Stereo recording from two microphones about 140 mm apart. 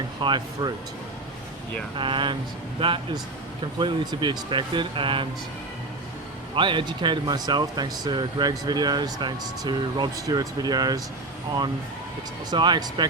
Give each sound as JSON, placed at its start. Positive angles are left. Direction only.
{"t": 0.2, "sound": "speech", "side_deg": -35}
{"t": 2.0, "sound": "speech", "side_deg": -35}
{"t": 6.6, "sound": "speech", "side_deg": -35}
{"t": 12.5, "sound": "speech", "side_deg": -35}